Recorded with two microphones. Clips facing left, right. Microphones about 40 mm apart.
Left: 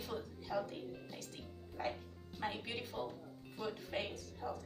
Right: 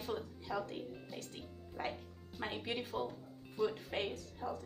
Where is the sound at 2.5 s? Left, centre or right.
Right.